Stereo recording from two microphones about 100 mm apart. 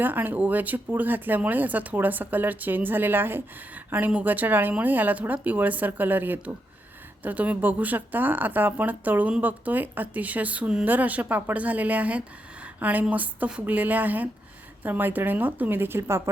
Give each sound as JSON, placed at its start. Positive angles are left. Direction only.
{"t": 0.0, "sound": "speech", "side_deg": -20}